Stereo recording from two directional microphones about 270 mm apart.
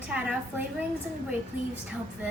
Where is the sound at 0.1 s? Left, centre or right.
Centre.